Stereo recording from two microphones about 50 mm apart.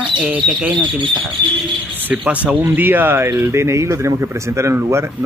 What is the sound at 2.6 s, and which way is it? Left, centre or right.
Speech, right.